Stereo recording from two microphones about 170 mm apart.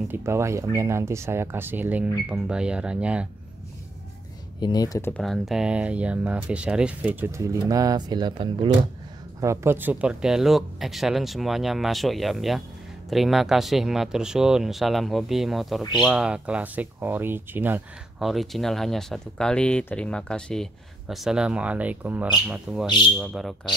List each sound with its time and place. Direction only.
0.1 s speech: 15° right (ahead or behind)
4.6 s speech: 25° left (ahead or behind)
5.1 s speech: centre (ahead or behind)
18.3 s speech: centre (ahead or behind)